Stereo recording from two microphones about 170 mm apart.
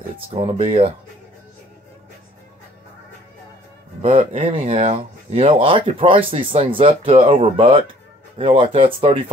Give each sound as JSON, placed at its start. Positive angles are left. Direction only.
{"t": 0.3, "sound": "speech", "side_deg": -35}
{"t": 4.0, "sound": "speech", "side_deg": -35}